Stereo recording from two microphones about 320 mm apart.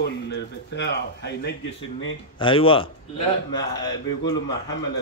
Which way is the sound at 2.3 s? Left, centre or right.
Centre.